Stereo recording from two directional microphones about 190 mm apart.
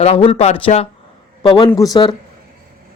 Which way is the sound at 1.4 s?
25° left (ahead or behind).